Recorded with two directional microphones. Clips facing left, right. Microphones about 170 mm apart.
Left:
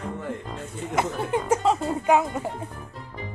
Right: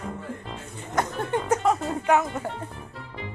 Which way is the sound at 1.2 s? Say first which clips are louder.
Even; 10° left (ahead or behind).